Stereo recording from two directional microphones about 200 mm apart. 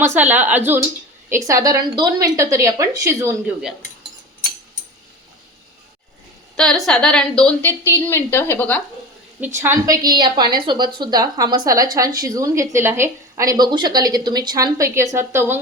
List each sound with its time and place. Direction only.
0.0 s a woman's voice: 10° right (ahead or behind)
6.6 s a woman's voice: 5° left (ahead or behind)
9.4 s a woman's voice: 15° right (ahead or behind)